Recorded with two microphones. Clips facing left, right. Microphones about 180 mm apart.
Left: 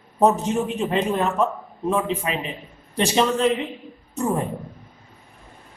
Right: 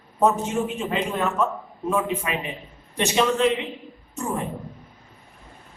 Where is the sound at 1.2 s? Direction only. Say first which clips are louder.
Left 2 dB; 35° left (ahead or behind).